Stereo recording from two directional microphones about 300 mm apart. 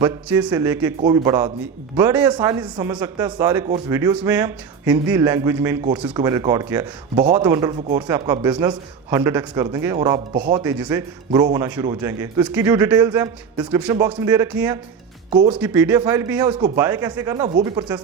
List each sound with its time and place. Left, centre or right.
0.0 s speech: centre
15.3 s speech: centre
15.5 s speech: centre